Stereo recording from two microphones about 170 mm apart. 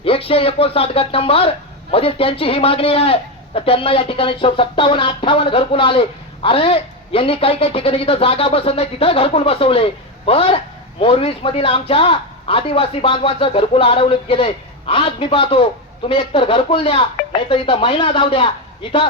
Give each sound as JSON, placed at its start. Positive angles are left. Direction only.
{"t": 0.0, "sound": "speech", "side_deg": 35}